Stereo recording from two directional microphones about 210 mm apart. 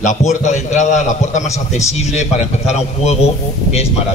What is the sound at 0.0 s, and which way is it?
A man's voice, 35° left (ahead or behind).